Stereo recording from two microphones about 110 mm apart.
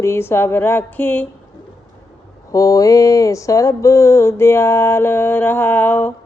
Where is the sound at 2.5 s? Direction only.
30° left (ahead or behind); by 6.1 s 15° left (ahead or behind).